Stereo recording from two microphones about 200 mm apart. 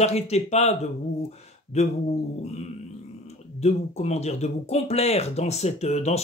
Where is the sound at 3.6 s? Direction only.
35° left (ahead or behind).